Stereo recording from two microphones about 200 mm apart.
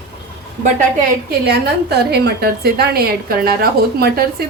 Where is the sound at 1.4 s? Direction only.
55° right (ahead or behind).